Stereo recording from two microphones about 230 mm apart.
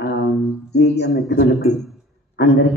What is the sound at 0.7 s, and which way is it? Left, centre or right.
Speech, left.